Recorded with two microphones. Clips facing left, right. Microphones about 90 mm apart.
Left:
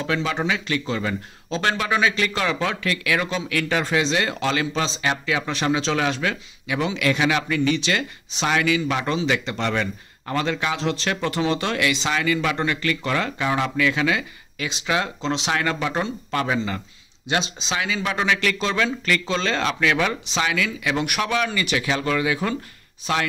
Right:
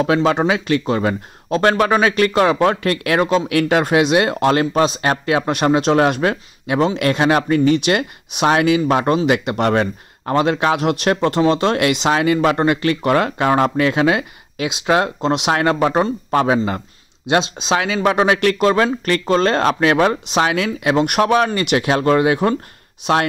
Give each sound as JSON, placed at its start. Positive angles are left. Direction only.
{"t": 0.0, "sound": "speech", "side_deg": -50}
{"t": 14.9, "sound": "speech", "side_deg": -50}
{"t": 17.3, "sound": "speech", "side_deg": -65}
{"t": 20.2, "sound": "speech", "side_deg": -60}